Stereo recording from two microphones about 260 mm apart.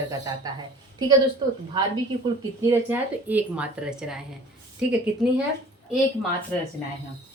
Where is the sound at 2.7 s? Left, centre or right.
Centre.